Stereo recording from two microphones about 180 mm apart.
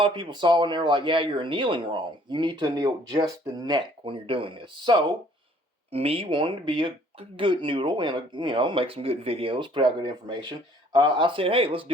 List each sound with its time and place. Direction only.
0.0 s speech: 25° right (ahead or behind)